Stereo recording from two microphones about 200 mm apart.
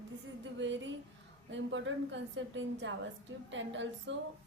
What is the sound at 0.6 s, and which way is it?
A woman's voice, 65° right (ahead or behind).